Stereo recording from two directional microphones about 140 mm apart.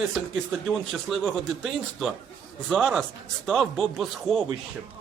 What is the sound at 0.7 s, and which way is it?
A man's voice, centre (ahead or behind).